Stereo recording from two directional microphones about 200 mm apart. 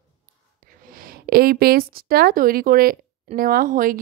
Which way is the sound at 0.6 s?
45° right (ahead or behind).